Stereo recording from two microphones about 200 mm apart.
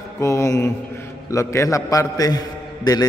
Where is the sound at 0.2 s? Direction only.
15° left (ahead or behind).